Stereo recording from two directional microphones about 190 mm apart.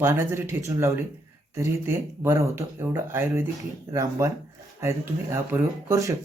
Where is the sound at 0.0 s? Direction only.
15° right (ahead or behind).